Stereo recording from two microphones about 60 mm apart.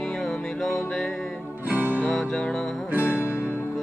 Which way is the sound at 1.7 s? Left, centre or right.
Right.